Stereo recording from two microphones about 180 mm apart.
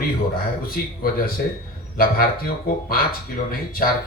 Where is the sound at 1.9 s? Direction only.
55° left (ahead or behind).